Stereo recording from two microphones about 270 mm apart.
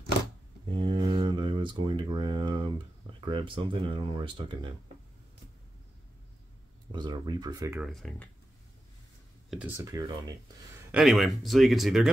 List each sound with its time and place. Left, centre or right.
0.7 s a sound: centre
1.1 s speech: centre
6.9 s speech: centre
9.5 s speech: centre
10.9 s speech: centre